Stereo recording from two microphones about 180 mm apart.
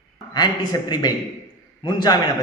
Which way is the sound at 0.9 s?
25° left (ahead or behind).